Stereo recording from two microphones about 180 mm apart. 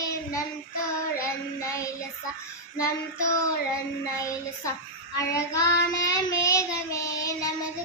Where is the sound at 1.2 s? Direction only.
15° left (ahead or behind).